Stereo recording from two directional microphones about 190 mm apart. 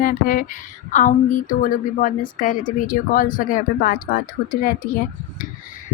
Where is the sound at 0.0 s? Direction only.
50° left (ahead or behind).